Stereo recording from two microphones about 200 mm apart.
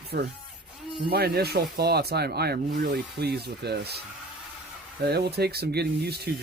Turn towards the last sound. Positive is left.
turn(degrees=-55)  # may be behind; listen again after turning